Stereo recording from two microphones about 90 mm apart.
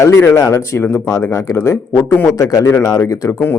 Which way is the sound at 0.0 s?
30° left (ahead or behind).